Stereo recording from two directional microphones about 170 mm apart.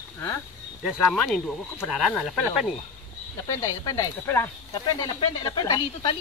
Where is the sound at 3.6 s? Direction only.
15° left (ahead or behind).